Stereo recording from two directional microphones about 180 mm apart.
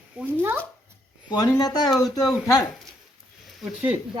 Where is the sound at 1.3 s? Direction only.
20° left (ahead or behind).